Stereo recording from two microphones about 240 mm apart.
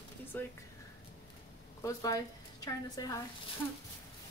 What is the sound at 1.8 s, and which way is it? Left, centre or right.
A woman's voice, centre.